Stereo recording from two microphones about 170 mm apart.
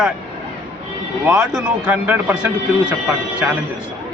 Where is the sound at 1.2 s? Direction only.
20° right (ahead or behind).